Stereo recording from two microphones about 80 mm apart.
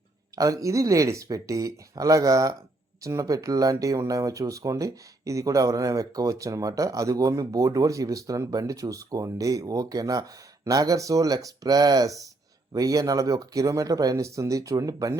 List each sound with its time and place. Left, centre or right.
0.3 s speech: right